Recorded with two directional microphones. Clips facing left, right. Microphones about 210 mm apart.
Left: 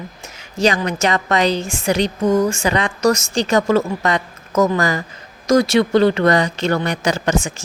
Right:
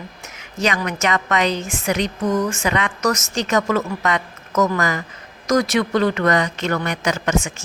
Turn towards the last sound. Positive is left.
turn(degrees=30)  # may be behind; listen again after turning